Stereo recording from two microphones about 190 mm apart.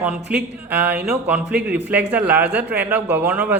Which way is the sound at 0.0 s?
5° right (ahead or behind).